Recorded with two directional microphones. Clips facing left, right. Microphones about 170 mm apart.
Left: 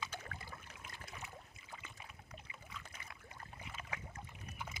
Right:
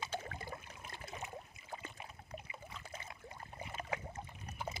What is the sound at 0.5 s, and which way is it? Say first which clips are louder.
Trickle: right 5 dB; 25° right (ahead or behind).